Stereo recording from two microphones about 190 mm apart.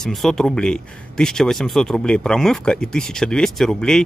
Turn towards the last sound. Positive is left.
turn(degrees=5)  # may be behind; listen again after turning